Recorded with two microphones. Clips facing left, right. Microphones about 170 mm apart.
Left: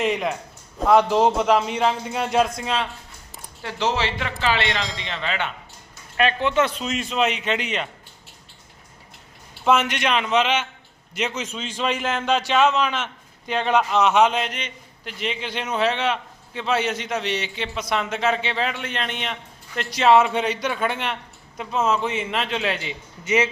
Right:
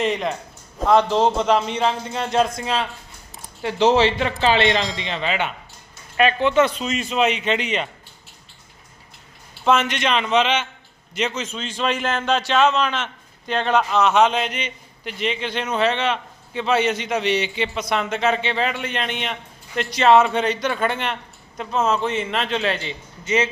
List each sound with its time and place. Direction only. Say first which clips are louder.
0.0 s a man's voice: right 1 dB; 5° left (ahead or behind)
3.6 s speech: right 8 dB; 20° right (ahead or behind)
6.1 s a man's voice: right 3 dB; centre (ahead or behind)
9.6 s a man's voice: right 1 dB; 10° left (ahead or behind)